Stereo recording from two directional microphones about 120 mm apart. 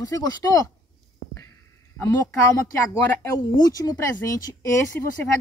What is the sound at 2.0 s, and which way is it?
Speech, 20° left (ahead or behind).